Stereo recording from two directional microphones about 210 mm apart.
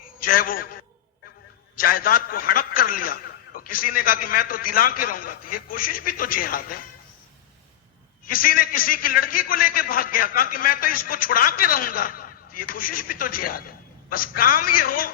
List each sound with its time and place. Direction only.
0.2 s a man's voice: 45° left (ahead or behind)
8.3 s a man's voice: 45° left (ahead or behind)